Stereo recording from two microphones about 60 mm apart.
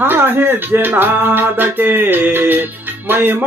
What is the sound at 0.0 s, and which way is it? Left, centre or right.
Speech, right.